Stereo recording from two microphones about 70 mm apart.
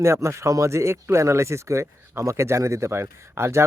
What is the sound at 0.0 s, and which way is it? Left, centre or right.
A man's voice, right.